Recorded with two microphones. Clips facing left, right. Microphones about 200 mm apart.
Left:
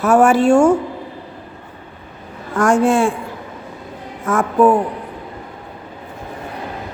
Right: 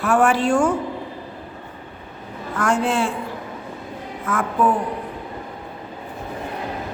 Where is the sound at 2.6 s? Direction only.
45° left (ahead or behind).